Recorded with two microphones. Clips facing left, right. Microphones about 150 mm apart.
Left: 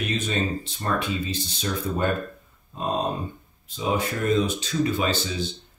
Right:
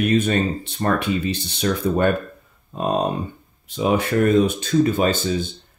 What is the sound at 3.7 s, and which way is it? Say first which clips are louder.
Speech: right 6 dB; 65° right (ahead or behind).